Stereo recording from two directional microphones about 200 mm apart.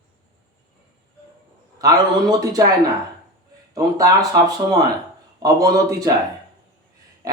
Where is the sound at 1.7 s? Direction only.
20° right (ahead or behind).